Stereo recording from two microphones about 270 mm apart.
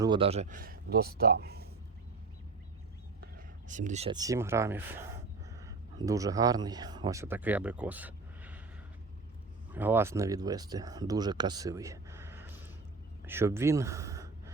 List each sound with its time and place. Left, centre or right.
0.0 s speech: centre; by 1.6 s right
3.7 s speech: right; by 8.6 s centre
9.7 s speech: centre